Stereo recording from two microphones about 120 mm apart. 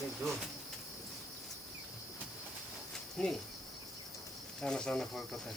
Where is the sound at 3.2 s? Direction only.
5° left (ahead or behind).